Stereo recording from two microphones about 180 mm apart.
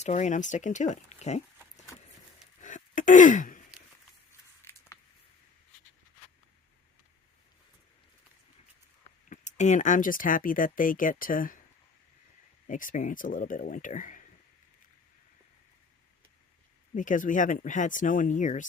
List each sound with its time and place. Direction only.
0.0 s speech: 40° left (ahead or behind)
2.6 s sigh: 45° left (ahead or behind)
4.6 s a sound: 15° left (ahead or behind)
9.3 s speech: 40° left (ahead or behind)
12.6 s speech: 45° left (ahead or behind)
16.9 s speech: 45° left (ahead or behind)